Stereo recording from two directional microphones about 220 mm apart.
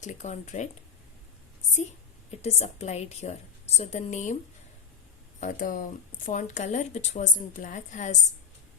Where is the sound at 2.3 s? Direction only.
30° left (ahead or behind).